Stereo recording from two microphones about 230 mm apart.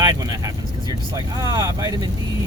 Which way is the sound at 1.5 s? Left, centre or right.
Centre.